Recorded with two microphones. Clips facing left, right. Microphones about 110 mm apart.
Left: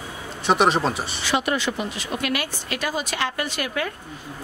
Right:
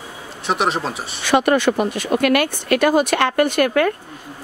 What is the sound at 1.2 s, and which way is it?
A woman's voice, 55° right (ahead or behind).